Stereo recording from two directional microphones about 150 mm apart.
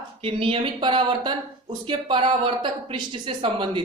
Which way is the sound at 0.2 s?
40° right (ahead or behind).